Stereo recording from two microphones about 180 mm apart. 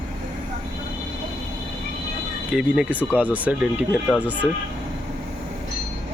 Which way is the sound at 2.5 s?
5° right (ahead or behind).